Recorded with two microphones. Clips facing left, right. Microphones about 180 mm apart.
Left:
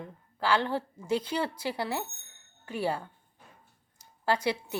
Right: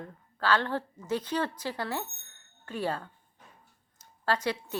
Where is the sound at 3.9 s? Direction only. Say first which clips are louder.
Left 1 dB; 15° left (ahead or behind).